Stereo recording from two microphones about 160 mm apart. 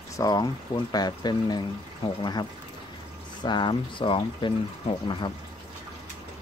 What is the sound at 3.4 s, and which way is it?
Speech, 30° left (ahead or behind).